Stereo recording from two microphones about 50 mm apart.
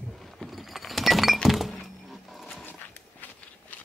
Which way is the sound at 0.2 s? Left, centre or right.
Centre.